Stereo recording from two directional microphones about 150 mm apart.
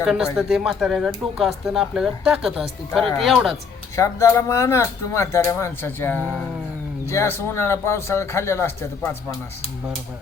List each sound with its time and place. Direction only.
0.0 s speech: 5° right (ahead or behind)
3.9 s speech: 20° left (ahead or behind)